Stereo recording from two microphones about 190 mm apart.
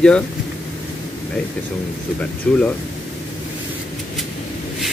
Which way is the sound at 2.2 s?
5° left (ahead or behind).